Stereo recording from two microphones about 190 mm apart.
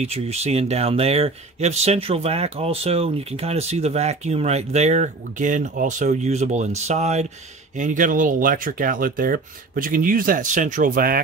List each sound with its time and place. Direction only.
0.0 s speech: 35° right (ahead or behind)